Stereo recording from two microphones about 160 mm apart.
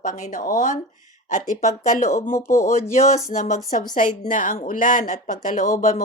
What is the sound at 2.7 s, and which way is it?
Speech, 50° left (ahead or behind).